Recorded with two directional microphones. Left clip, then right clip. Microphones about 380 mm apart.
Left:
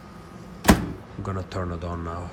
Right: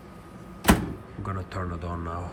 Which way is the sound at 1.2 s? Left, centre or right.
Centre.